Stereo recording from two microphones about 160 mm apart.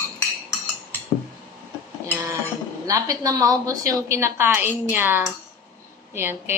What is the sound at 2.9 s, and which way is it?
A woman's voice, 20° right (ahead or behind).